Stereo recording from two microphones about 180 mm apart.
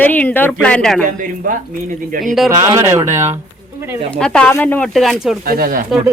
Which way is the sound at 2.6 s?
20° right (ahead or behind).